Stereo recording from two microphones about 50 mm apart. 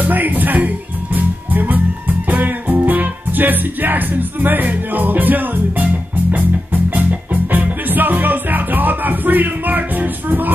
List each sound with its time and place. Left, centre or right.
0.0 s music: right